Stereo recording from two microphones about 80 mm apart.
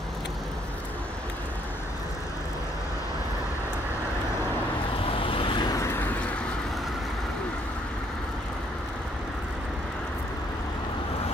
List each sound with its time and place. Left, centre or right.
5.2 s vehicle: left
5.7 s vehicle: left
5.9 s vehicle: centre